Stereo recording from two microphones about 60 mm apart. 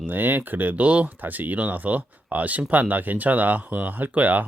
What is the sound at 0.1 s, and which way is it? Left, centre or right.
Speech, right.